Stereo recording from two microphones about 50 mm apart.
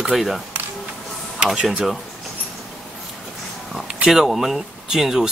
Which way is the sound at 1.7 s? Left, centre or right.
Centre.